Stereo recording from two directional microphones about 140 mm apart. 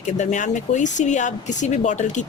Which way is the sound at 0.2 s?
60° left (ahead or behind).